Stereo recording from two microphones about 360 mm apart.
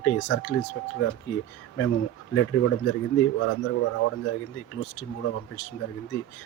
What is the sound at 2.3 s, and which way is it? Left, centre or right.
Speech, left.